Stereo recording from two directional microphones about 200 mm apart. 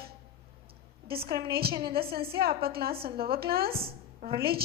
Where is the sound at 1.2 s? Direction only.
50° right (ahead or behind).